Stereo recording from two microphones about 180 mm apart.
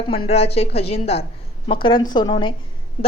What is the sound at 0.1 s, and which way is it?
A woman's voice, 35° left (ahead or behind).